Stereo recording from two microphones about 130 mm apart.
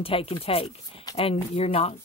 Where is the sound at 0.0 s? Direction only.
45° left (ahead or behind).